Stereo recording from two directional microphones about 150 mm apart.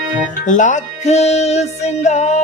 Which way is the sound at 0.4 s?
55° left (ahead or behind).